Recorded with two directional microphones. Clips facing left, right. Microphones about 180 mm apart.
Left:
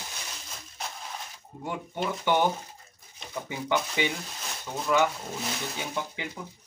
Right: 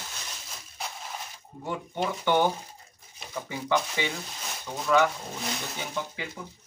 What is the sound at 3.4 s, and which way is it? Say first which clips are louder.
Speech: right 1 dB; 20° left (ahead or behind).